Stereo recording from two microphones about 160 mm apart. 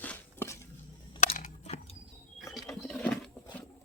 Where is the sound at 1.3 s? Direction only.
55° left (ahead or behind).